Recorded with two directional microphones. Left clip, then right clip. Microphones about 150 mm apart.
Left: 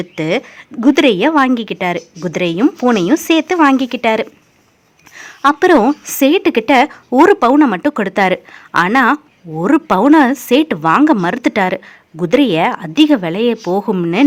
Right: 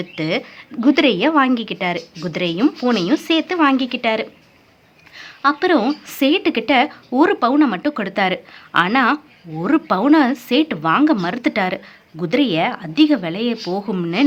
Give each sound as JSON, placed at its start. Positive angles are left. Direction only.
{"t": 0.0, "sound": "a woman's voice", "side_deg": 40}